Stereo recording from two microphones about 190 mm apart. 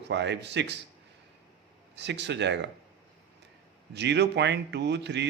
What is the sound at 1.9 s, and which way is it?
Speech, 65° right (ahead or behind).